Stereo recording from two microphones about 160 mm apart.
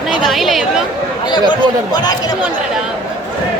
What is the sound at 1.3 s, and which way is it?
Speech, 25° left (ahead or behind).